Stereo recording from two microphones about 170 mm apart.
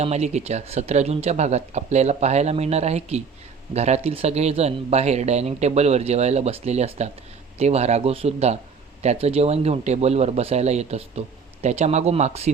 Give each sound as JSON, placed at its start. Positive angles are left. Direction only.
{"t": 0.0, "sound": "speech", "side_deg": -40}